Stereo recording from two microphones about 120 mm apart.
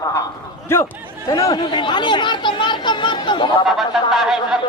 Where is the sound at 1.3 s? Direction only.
35° left (ahead or behind).